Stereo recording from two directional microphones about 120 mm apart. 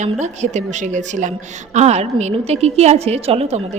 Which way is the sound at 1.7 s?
70° right (ahead or behind).